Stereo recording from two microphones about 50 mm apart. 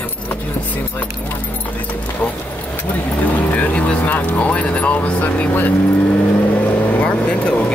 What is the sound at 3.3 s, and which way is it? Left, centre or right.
Speech, left.